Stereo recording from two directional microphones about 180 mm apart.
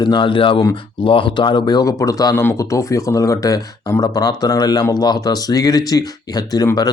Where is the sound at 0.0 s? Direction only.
25° left (ahead or behind).